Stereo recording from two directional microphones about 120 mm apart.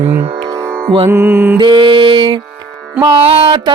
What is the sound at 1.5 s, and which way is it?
Music, 40° right (ahead or behind).